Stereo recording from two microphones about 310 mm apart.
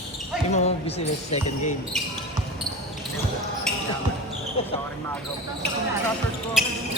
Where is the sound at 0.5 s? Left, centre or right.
Left.